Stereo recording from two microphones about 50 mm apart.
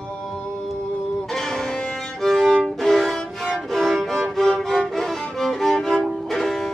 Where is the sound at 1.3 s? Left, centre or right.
Centre.